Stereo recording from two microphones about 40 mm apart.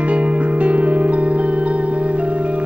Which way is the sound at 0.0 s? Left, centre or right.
Right.